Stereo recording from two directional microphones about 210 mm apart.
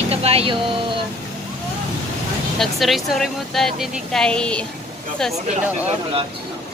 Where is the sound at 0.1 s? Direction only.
30° right (ahead or behind).